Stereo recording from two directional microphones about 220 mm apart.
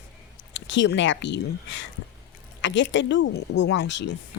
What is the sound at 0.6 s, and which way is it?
Speech, 55° left (ahead or behind).